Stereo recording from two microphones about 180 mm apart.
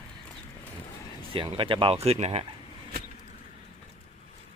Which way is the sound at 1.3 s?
30° right (ahead or behind).